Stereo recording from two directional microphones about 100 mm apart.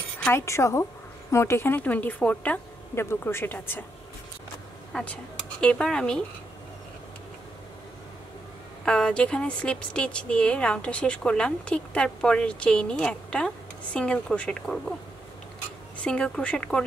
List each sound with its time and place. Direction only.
0.3 s a woman's voice: 30° left (ahead or behind)
2.9 s speech: 25° left (ahead or behind)
4.9 s speech: 10° left (ahead or behind)
8.8 s a woman's voice: 10° left (ahead or behind)
16.0 s a woman's voice: 10° left (ahead or behind)